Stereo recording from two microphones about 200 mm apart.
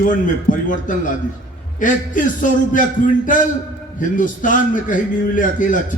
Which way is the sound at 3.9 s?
40° left (ahead or behind).